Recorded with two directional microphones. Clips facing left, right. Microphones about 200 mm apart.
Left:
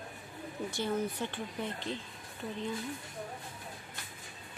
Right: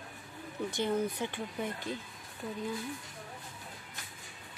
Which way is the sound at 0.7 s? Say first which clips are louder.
Right 2 dB; 15° right (ahead or behind).